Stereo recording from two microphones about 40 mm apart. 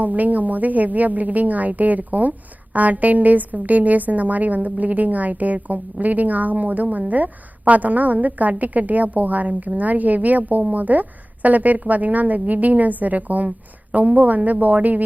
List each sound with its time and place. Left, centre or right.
0.0 s a woman's voice: right